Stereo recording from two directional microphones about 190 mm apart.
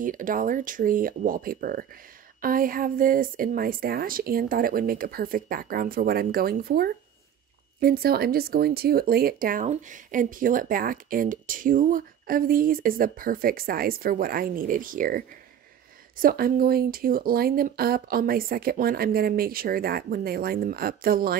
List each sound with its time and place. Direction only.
0.0 s speech: 45° right (ahead or behind)